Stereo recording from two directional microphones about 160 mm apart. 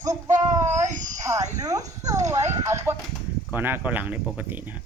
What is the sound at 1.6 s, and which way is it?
Speech, 20° right (ahead or behind).